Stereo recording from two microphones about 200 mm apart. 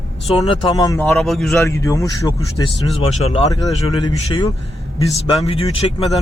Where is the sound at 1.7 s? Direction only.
15° left (ahead or behind).